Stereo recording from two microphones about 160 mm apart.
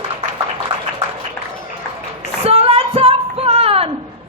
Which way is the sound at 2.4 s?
40° right (ahead or behind).